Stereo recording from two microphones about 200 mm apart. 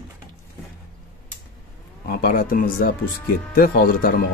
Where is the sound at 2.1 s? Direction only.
50° left (ahead or behind).